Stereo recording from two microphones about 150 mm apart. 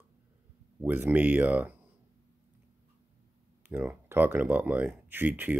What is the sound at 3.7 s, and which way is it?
A man's voice, 15° right (ahead or behind).